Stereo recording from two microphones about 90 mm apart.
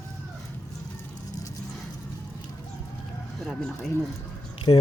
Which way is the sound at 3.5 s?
5° left (ahead or behind).